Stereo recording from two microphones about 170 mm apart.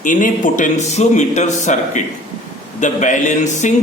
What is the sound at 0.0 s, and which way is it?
A man's voice, 50° left (ahead or behind).